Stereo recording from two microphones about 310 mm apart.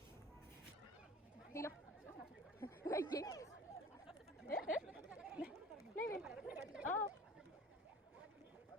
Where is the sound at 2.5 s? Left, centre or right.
Centre.